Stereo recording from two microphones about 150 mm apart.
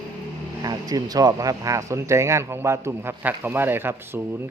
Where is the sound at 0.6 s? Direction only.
25° right (ahead or behind).